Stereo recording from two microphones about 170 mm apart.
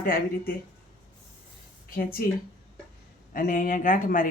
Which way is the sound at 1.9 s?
55° left (ahead or behind).